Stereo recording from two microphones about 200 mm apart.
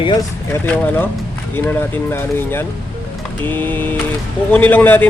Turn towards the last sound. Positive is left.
turn(degrees=10)  # may be behind; listen again after turning